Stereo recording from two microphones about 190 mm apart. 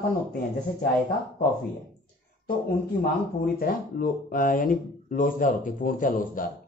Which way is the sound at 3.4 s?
50° left (ahead or behind).